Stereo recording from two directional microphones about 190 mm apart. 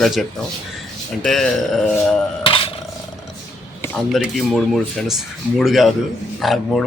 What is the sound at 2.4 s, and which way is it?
Cutlery, 30° left (ahead or behind).